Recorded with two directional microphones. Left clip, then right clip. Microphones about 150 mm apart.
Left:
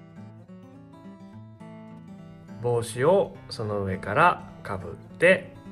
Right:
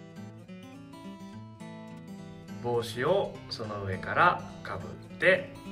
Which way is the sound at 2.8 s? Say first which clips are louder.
Left 6 dB; 50° left (ahead or behind).